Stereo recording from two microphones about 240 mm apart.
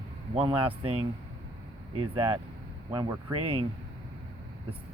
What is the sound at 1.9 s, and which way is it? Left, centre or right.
Speech, centre.